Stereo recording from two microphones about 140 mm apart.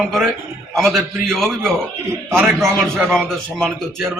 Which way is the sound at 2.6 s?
15° right (ahead or behind).